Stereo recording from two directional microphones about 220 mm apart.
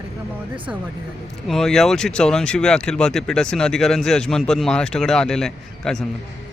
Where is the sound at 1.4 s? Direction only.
Centre (ahead or behind).